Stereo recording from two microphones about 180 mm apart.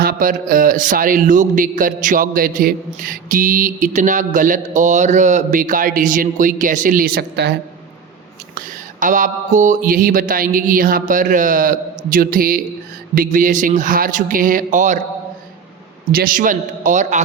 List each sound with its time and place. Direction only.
0.0 s a man's voice: 50° right (ahead or behind)
8.5 s a man's voice: 45° right (ahead or behind)
16.1 s a man's voice: 50° right (ahead or behind)